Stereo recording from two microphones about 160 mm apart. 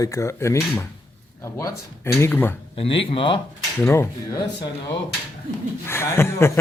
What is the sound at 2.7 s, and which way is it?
Speech, 35° left (ahead or behind).